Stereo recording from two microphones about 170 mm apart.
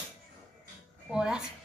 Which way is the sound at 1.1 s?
5° right (ahead or behind).